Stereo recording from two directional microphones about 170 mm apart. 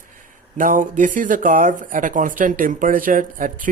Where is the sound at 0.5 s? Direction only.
50° right (ahead or behind).